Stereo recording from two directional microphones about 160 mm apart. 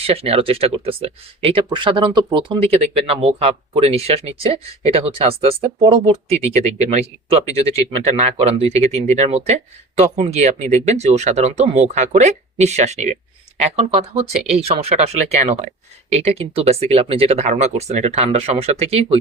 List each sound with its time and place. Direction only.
0.0 s speech: 40° right (ahead or behind)